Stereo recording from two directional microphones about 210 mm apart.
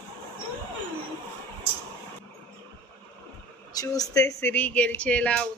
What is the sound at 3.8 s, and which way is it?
Speech, 15° left (ahead or behind).